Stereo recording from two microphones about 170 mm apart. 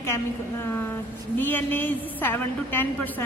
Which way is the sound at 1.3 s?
10° left (ahead or behind).